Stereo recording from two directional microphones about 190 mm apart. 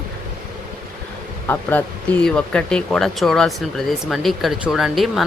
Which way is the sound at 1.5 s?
10° left (ahead or behind).